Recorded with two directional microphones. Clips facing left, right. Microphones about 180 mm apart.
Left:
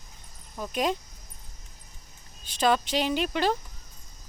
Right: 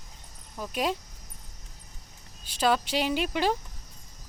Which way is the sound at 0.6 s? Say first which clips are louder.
Left 2 dB; 5° right (ahead or behind).